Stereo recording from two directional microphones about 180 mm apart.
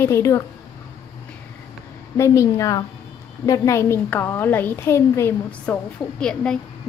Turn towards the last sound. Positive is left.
turn(degrees=5)  # may be behind; listen again after turning